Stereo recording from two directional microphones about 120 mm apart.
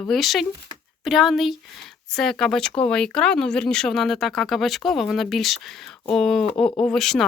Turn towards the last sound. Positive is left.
turn(degrees=5)  # may be behind; listen again after turning